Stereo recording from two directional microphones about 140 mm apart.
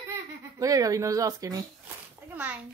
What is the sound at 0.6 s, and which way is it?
Speech, 25° right (ahead or behind).